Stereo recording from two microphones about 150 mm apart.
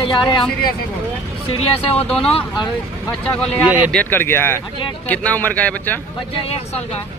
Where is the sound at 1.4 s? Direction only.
40° left (ahead or behind).